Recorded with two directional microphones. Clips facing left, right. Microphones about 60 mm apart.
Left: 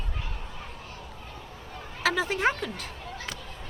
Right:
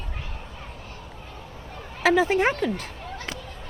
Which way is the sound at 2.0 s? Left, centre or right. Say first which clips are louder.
Right 6 dB; right.